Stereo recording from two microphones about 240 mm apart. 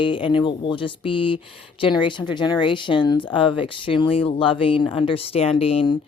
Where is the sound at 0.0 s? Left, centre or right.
Left.